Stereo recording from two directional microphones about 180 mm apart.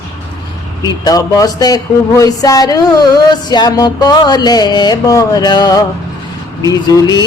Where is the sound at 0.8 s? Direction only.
20° left (ahead or behind).